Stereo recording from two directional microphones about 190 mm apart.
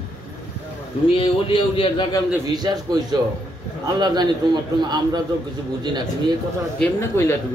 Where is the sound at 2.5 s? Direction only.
20° right (ahead or behind).